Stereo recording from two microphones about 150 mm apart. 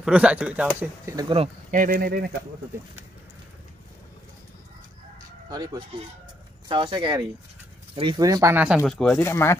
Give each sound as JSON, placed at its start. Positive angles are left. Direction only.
{"t": 0.0, "sound": "speech", "side_deg": -10}
{"t": 1.1, "sound": "speech", "side_deg": -20}
{"t": 1.7, "sound": "speech", "side_deg": -65}
{"t": 5.5, "sound": "speech", "side_deg": -25}
{"t": 8.6, "sound": "speech", "side_deg": -5}
{"t": 9.2, "sound": "speech", "side_deg": 15}